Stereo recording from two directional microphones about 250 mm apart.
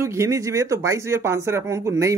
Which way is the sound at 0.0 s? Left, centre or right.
Centre.